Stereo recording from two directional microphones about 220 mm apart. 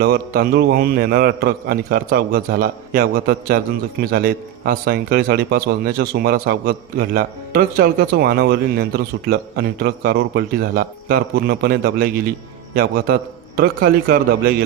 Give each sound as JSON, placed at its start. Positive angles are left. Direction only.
{"t": 0.0, "sound": "a man's voice", "side_deg": -45}